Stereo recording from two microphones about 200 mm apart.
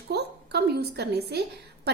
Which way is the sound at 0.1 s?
55° right (ahead or behind).